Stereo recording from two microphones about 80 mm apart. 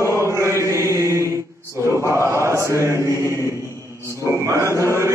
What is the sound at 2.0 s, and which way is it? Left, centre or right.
Chant, right.